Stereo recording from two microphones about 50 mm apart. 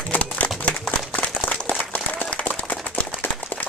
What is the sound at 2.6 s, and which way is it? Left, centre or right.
Clapping, left.